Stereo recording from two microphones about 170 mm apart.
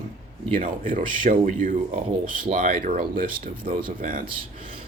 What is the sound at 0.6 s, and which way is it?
Speech, 55° right (ahead or behind).